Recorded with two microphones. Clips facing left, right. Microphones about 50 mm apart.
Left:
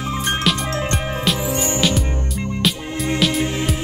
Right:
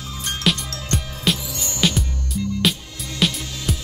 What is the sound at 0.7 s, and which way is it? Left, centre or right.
Music, left.